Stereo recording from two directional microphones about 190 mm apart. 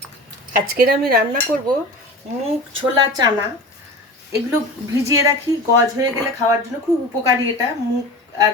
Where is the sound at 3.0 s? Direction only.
20° right (ahead or behind).